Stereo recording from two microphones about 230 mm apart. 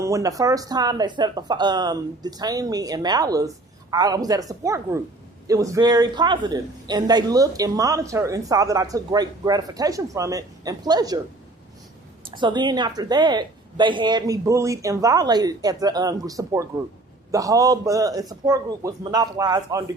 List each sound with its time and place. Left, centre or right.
0.0 s a man's voice: centre
12.4 s a woman's voice: centre